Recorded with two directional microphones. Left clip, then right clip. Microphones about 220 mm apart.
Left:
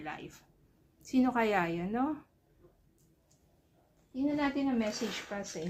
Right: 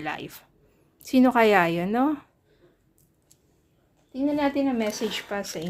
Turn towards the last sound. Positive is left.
turn(degrees=-50)  # may be behind; listen again after turning